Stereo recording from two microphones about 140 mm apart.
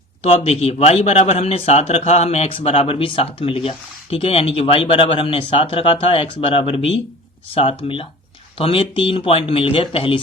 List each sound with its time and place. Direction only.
0.2 s a man's voice: 50° left (ahead or behind)